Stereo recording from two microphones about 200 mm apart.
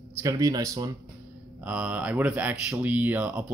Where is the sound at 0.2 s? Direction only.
15° right (ahead or behind).